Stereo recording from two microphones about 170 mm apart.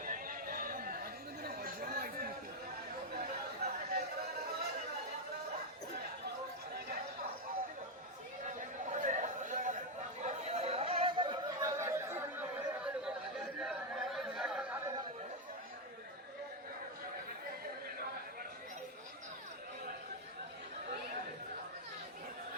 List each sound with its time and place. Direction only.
0.0 s chatter: 55° right (ahead or behind)
8.4 s a sound: 50° right (ahead or behind)
10.2 s chatter: 40° right (ahead or behind); by 14.8 s 5° right (ahead or behind)